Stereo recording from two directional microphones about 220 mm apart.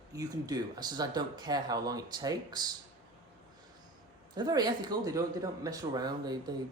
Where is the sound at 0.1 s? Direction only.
15° right (ahead or behind).